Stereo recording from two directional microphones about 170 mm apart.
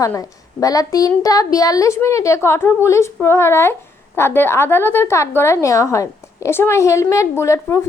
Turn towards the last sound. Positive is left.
turn(degrees=15)  # may be behind; listen again after turning